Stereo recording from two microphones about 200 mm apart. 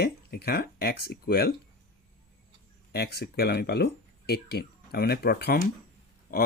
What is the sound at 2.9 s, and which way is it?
Speech, 55° left (ahead or behind).